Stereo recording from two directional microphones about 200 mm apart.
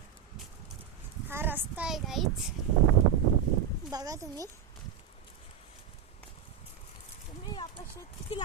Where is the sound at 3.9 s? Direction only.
15° right (ahead or behind).